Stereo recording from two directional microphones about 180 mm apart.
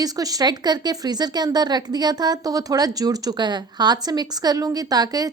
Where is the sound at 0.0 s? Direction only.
20° right (ahead or behind).